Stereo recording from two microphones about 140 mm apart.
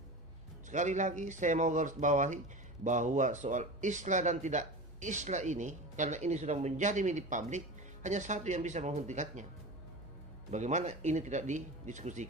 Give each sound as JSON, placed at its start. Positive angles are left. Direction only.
{"t": 0.7, "sound": "speech", "side_deg": -60}
{"t": 10.5, "sound": "speech", "side_deg": -55}